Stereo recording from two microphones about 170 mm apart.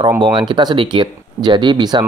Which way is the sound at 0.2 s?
30° right (ahead or behind).